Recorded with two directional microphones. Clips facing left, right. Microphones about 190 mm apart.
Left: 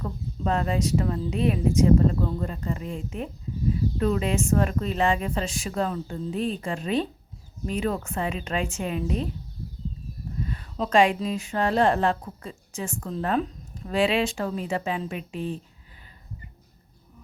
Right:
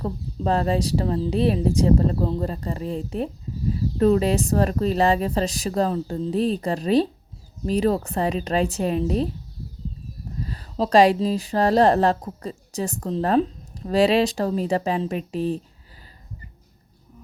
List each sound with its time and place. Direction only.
0.0 s a woman's voice: 35° right (ahead or behind)
10.4 s a woman's voice: 35° right (ahead or behind)